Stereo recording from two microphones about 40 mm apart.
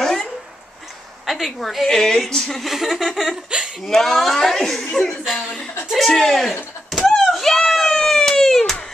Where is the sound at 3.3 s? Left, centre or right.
Centre.